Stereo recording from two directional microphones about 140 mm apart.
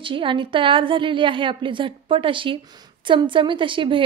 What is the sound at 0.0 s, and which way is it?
A woman's voice, 35° right (ahead or behind).